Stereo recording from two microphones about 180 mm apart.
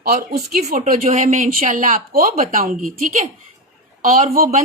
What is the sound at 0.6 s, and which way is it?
Speech, 45° right (ahead or behind).